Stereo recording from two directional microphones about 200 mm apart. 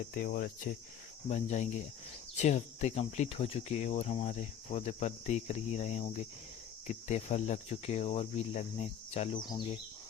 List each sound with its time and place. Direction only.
0.1 s speech: 45° left (ahead or behind); by 9.5 s 30° left (ahead or behind)